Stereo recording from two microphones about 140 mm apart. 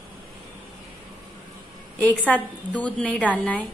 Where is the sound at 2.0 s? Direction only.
10° left (ahead or behind).